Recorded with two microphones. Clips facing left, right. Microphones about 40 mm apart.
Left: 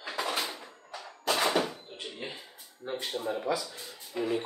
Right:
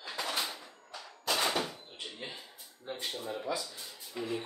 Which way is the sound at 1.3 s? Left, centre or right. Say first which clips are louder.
Left 4 dB; centre.